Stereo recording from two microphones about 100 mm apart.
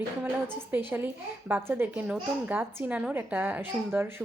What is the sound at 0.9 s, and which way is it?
A woman's voice, 20° right (ahead or behind).